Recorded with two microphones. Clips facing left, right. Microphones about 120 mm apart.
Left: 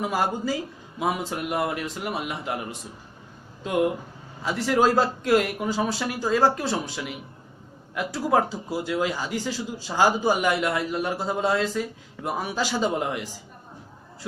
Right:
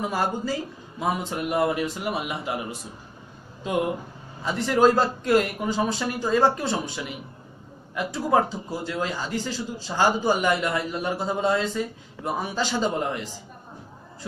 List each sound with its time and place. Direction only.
0.1 s speech: 10° left (ahead or behind)
4.4 s speech: 5° left (ahead or behind)